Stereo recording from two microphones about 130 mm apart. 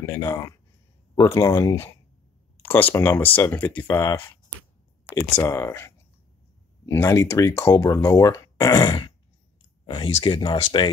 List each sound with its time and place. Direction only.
0.0 s speech: 20° left (ahead or behind); by 10.9 s 40° left (ahead or behind)